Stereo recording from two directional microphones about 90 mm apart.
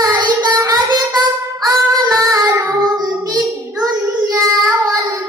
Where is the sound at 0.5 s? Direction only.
45° right (ahead or behind).